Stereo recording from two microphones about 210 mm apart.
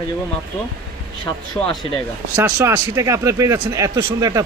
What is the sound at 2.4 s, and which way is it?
Speech, 10° right (ahead or behind).